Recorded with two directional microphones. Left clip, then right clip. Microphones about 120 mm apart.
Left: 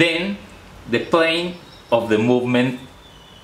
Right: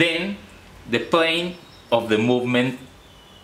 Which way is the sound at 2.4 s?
Centre (ahead or behind).